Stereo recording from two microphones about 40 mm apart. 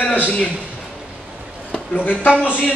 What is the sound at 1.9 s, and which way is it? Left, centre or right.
Speech, left.